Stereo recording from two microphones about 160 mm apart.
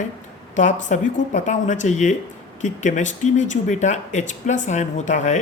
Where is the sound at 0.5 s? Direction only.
50° left (ahead or behind).